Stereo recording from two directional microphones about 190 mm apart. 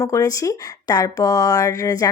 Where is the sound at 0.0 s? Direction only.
15° left (ahead or behind).